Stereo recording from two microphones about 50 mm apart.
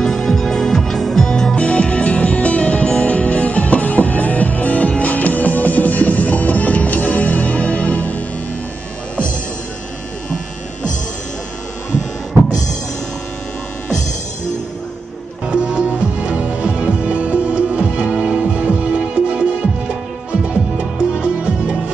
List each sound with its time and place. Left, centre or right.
0.0 s music: centre
1.6 s music: left
15.5 s music: centre